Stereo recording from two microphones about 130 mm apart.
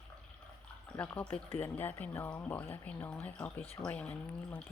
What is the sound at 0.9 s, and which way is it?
Speech, 10° left (ahead or behind).